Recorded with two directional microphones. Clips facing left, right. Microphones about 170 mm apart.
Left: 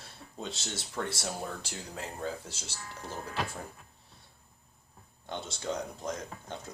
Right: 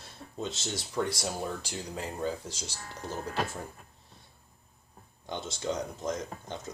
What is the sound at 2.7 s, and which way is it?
Speech, 35° right (ahead or behind).